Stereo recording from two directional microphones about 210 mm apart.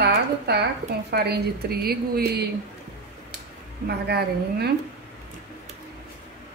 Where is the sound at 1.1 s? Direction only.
50° right (ahead or behind).